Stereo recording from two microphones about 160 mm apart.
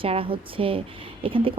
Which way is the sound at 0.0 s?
35° right (ahead or behind).